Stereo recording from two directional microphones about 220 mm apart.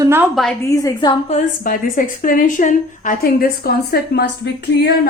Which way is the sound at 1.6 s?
40° left (ahead or behind).